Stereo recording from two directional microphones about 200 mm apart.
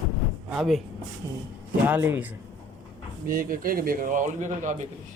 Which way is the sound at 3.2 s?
45° right (ahead or behind).